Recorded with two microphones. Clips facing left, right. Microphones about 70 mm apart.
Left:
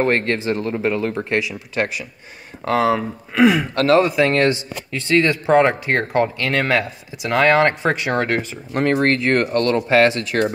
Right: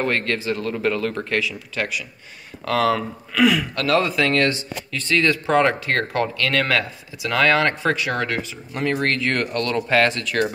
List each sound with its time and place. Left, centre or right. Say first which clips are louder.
0.0 s speech: left 4 dB; left
9.8 s speech: left 2 dB; left